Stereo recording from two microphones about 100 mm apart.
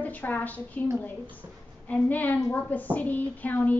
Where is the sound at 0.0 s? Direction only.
15° left (ahead or behind).